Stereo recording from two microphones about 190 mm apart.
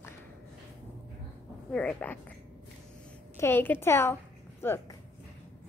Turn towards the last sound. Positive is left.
turn(degrees=10)  # may be behind; listen again after turning